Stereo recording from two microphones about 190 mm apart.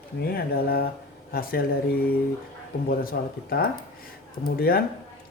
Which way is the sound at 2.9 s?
50° left (ahead or behind).